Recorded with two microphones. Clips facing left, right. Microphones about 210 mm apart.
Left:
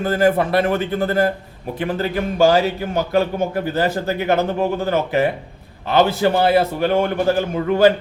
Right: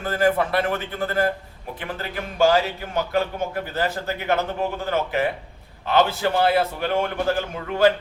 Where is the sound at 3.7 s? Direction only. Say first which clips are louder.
Left 5 dB; 40° left (ahead or behind).